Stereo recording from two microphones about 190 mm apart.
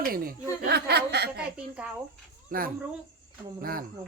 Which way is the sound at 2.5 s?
50° right (ahead or behind).